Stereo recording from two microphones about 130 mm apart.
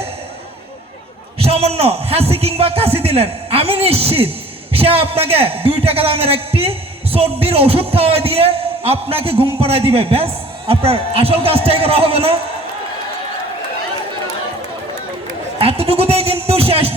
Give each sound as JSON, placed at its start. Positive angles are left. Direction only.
{"t": 1.4, "sound": "a man's voice", "side_deg": -50}
{"t": 15.5, "sound": "a man's voice", "side_deg": -50}